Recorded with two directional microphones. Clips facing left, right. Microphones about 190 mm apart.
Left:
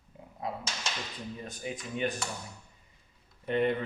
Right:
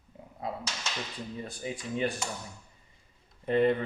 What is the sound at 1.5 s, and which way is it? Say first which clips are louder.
Speech: right 2 dB; 30° right (ahead or behind).